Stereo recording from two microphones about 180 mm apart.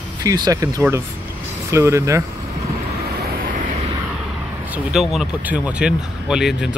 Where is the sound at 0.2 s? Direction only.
20° right (ahead or behind).